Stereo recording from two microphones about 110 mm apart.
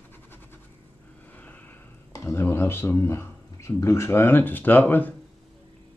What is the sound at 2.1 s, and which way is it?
Speech, 25° left (ahead or behind).